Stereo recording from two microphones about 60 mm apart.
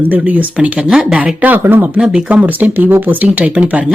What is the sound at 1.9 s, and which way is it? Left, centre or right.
Speech, centre.